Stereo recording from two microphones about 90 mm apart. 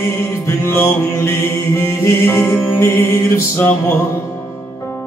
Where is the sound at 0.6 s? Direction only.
30° left (ahead or behind).